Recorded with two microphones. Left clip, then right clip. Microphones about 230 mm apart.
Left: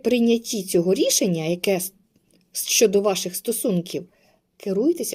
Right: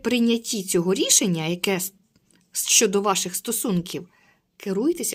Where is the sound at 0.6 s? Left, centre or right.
Right.